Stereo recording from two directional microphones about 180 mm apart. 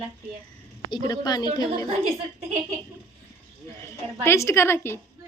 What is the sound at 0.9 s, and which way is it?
A woman's voice, 25° left (ahead or behind).